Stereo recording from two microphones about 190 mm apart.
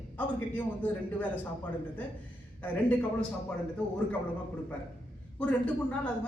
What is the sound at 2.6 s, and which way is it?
Speech, 10° left (ahead or behind).